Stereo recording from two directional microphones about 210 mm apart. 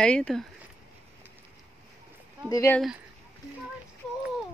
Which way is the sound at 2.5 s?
15° left (ahead or behind).